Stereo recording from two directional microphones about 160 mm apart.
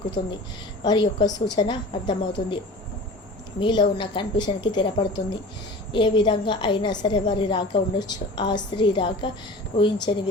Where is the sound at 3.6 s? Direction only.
30° left (ahead or behind).